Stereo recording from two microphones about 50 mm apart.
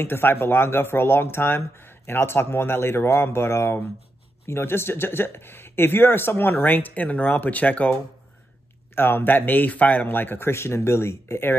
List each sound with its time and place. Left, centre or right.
0.0 s speech: left
8.9 s speech: left